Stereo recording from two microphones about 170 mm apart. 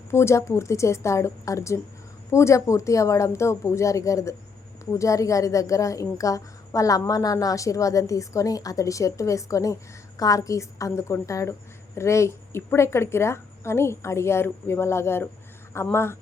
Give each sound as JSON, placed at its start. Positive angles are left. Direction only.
{"t": 0.1, "sound": "a woman's voice", "side_deg": 15}